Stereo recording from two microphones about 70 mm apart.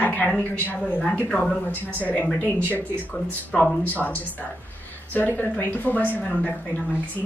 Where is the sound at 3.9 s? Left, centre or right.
Left.